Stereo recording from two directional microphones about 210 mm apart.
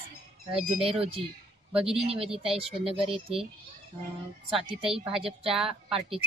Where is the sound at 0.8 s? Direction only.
25° right (ahead or behind).